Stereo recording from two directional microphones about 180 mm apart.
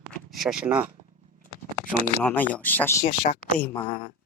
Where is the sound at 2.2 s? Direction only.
10° left (ahead or behind).